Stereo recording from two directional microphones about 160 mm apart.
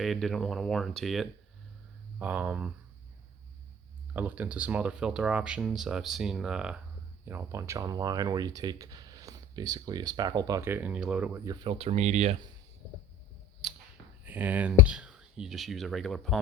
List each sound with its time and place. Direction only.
0.0 s speech: centre (ahead or behind)
4.1 s speech: 10° right (ahead or behind)
7.3 s speech: 15° right (ahead or behind)
11.4 s speech: 35° right (ahead or behind)
13.6 s a sound: centre (ahead or behind)
14.3 s speech: 10° right (ahead or behind)